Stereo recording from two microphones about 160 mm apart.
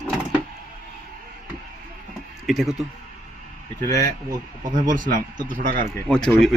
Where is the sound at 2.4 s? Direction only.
Centre (ahead or behind).